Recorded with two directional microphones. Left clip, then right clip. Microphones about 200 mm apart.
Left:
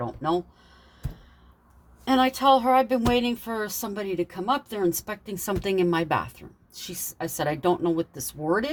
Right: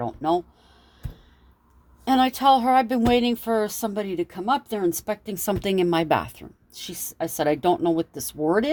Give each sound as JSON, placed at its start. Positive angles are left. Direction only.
{"t": 0.0, "sound": "speech", "side_deg": -45}
{"t": 2.0, "sound": "speech", "side_deg": -45}